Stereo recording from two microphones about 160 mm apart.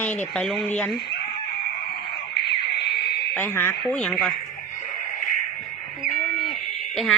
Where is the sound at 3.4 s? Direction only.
15° left (ahead or behind).